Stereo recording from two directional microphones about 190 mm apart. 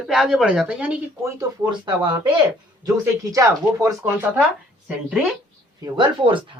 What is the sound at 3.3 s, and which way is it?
Speech, 15° right (ahead or behind).